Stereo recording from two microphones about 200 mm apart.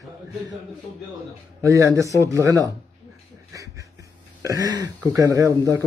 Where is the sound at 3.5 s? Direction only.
15° right (ahead or behind).